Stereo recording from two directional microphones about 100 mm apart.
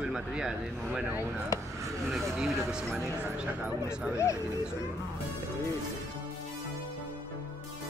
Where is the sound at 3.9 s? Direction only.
30° left (ahead or behind).